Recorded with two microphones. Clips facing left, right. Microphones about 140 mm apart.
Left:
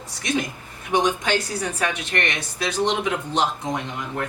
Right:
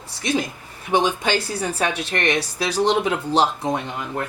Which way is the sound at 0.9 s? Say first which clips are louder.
Right 1 dB; 30° right (ahead or behind).